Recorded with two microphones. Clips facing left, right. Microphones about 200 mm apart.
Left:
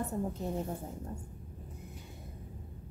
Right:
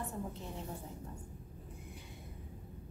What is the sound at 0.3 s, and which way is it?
Speech, 45° left (ahead or behind).